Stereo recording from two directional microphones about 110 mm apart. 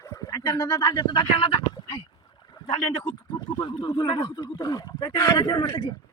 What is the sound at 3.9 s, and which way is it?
Speech, 50° left (ahead or behind).